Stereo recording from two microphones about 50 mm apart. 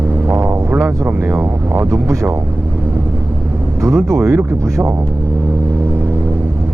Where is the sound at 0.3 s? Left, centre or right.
Right.